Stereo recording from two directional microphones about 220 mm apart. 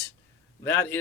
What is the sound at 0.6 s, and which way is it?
Speech, 10° left (ahead or behind).